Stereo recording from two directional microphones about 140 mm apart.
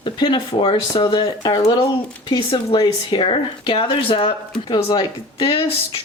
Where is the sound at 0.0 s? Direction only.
35° left (ahead or behind).